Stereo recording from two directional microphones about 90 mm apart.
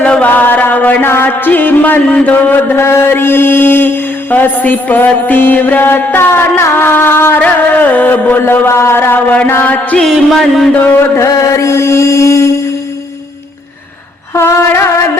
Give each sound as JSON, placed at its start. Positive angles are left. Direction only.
{"t": 0.0, "sound": "chant", "side_deg": 15}
{"t": 10.0, "sound": "music", "side_deg": 0}
{"t": 11.2, "sound": "mantra", "side_deg": 35}
{"t": 14.3, "sound": "a sound", "side_deg": 30}